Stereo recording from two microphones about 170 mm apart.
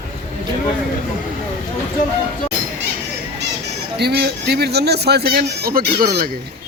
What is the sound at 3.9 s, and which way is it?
A man's voice, 75° right (ahead or behind).